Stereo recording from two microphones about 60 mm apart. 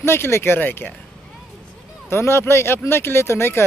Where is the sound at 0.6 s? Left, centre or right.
Left.